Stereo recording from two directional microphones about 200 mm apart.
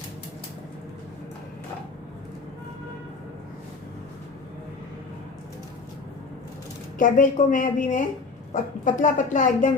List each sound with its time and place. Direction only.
7.0 s a woman's voice: 40° left (ahead or behind)